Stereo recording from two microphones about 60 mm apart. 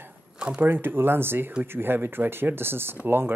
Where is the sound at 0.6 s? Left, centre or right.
Right.